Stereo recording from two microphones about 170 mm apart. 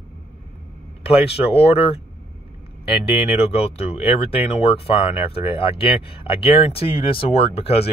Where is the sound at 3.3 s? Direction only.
40° left (ahead or behind).